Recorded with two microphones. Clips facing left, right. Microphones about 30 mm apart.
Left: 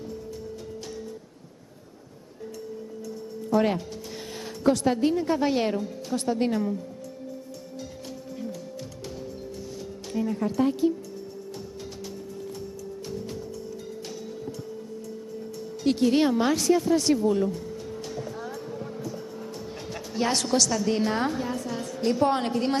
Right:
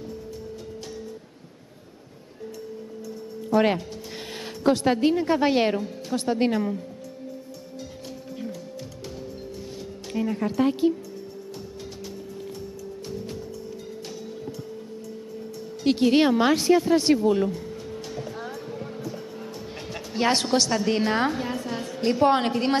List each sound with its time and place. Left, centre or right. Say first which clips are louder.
3.5 s speech: right 2 dB; right
10.1 s speech: right 1 dB; right
15.8 s speech: right 2 dB; right
17.5 s music: right 1 dB; centre
20.2 s a woman's voice: right 2 dB; right